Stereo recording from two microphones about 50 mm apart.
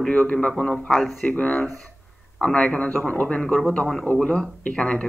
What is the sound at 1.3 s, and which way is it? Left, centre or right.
Speech, left.